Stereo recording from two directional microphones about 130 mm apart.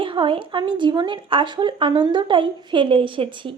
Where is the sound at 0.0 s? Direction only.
40° right (ahead or behind).